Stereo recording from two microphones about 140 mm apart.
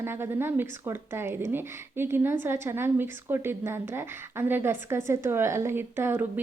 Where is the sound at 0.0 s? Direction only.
15° right (ahead or behind).